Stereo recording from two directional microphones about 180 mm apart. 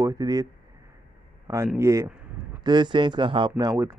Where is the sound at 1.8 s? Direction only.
15° right (ahead or behind).